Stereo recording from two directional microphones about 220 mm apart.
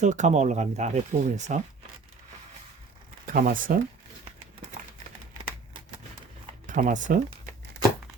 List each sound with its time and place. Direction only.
0.0 s speech: 35° right (ahead or behind)
3.2 s speech: 40° right (ahead or behind)
6.7 s speech: 35° right (ahead or behind)